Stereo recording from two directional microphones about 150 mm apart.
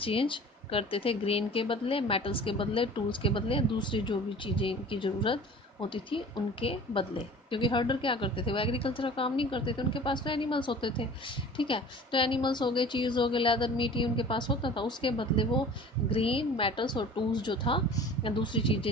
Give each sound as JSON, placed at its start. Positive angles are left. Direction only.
{"t": 0.0, "sound": "speech", "side_deg": 35}